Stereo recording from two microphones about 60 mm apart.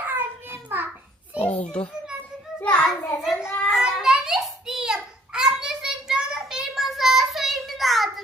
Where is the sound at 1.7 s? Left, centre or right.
Centre.